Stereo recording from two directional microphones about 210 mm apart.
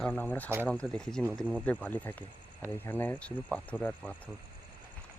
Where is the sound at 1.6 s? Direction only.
5° left (ahead or behind).